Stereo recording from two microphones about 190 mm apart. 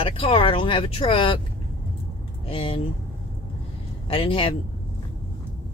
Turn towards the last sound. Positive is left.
turn(degrees=30)  # may be behind; listen again after turning